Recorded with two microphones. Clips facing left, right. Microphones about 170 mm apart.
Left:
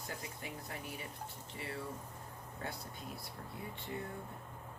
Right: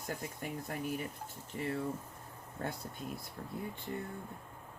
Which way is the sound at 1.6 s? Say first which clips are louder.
Right 8 dB; 45° right (ahead or behind).